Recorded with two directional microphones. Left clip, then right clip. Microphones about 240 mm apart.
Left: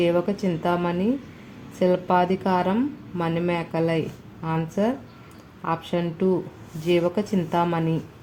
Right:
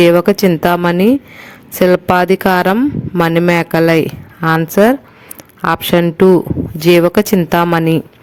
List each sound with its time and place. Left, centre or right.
0.0 s speech: right